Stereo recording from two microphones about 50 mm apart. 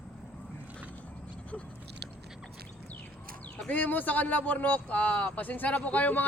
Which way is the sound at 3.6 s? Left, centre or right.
Left.